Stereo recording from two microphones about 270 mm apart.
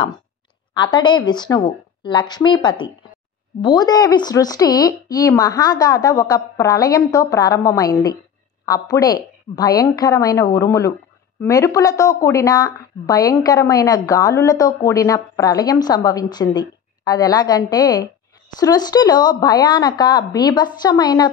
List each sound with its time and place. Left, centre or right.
0.7 s a woman's voice: centre